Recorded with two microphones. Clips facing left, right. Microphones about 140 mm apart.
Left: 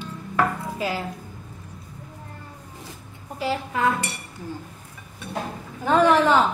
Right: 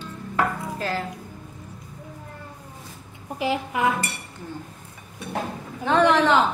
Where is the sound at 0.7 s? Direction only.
10° left (ahead or behind).